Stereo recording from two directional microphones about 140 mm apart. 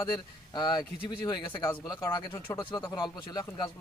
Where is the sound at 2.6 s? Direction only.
35° left (ahead or behind).